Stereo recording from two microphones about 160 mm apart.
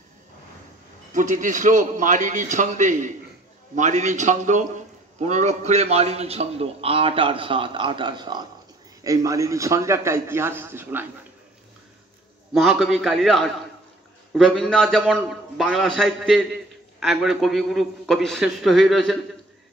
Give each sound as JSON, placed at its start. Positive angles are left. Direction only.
{"t": 1.1, "sound": "a man's voice", "side_deg": -50}
{"t": 12.5, "sound": "a man's voice", "side_deg": 0}